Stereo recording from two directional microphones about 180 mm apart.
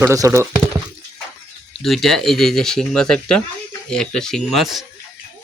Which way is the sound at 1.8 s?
Centre (ahead or behind).